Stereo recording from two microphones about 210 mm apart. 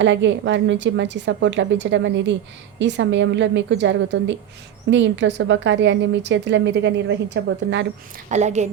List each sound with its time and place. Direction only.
0.0 s a woman's voice: 60° right (ahead or behind)
8.3 s a woman's voice: 35° right (ahead or behind)